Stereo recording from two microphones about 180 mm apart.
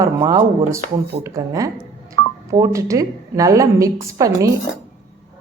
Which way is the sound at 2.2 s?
20° left (ahead or behind).